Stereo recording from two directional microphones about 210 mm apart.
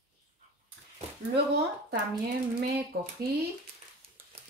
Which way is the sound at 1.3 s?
50° right (ahead or behind).